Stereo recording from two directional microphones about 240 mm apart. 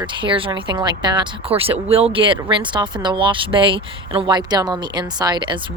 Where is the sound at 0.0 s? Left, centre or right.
Centre.